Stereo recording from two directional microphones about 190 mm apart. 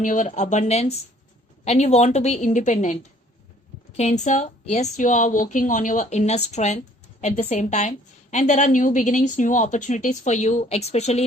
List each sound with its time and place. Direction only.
0.0 s a woman's voice: 40° left (ahead or behind)